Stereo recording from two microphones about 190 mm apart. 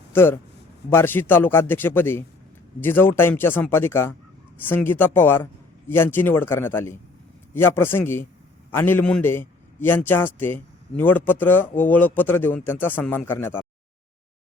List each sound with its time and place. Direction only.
0.1 s a man's voice: 10° left (ahead or behind)